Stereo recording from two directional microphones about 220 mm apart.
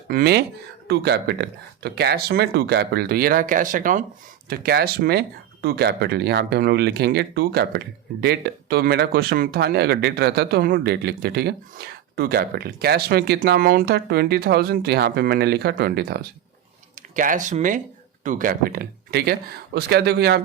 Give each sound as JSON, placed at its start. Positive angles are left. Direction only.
{"t": 0.1, "sound": "speech", "side_deg": -45}
{"t": 17.2, "sound": "speech", "side_deg": -35}